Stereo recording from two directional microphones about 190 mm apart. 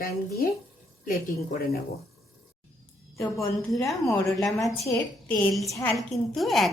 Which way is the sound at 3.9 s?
Centre (ahead or behind).